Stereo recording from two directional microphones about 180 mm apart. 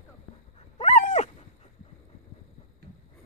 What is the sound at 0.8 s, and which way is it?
Dog, 40° left (ahead or behind).